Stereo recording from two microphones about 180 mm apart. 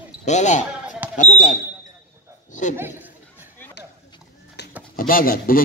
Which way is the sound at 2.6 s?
45° left (ahead or behind).